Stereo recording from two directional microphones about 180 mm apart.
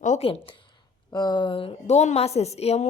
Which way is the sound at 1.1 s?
25° left (ahead or behind).